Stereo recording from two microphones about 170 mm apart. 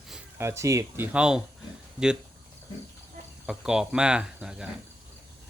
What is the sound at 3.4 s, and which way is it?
Speech, 5° right (ahead or behind).